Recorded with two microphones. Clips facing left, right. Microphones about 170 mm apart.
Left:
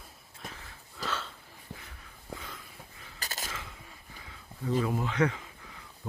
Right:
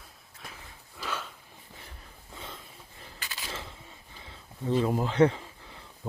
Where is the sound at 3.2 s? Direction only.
40° left (ahead or behind).